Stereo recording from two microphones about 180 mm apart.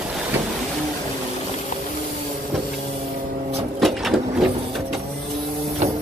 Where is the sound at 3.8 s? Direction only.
Centre (ahead or behind).